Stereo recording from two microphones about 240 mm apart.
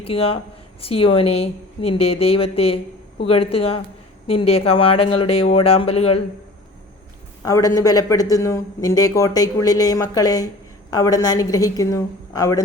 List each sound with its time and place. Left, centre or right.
0.0 s speech: left
7.4 s speech: centre